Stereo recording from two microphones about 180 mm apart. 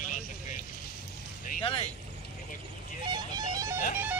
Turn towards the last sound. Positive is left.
turn(degrees=-20)  # may be behind; listen again after turning